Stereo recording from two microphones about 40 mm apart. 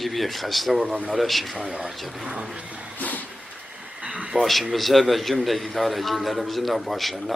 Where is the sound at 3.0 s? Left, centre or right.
Left.